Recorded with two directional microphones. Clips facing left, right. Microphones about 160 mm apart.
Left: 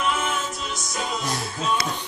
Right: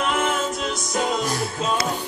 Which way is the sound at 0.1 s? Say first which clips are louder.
Right 4 dB; 55° right (ahead or behind).